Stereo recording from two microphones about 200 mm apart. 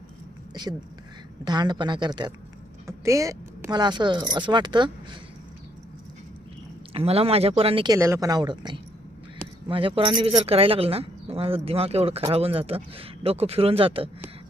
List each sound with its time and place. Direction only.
1.5 s speech: 20° right (ahead or behind)
6.9 s speech: 30° right (ahead or behind)
7.9 s speech: 15° right (ahead or behind)